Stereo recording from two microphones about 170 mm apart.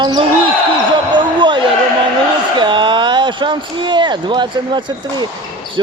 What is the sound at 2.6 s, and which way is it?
Speech, 30° right (ahead or behind).